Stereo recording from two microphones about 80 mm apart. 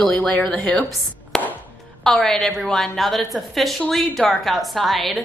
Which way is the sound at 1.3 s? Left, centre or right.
Centre.